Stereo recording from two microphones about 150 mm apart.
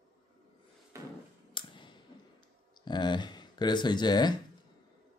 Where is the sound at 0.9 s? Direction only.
20° right (ahead or behind).